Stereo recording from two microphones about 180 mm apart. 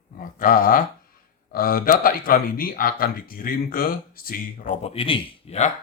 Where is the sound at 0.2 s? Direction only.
50° left (ahead or behind).